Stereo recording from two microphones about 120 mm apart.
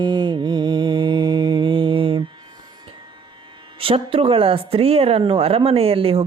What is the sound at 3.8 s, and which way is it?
Speech, 50° right (ahead or behind).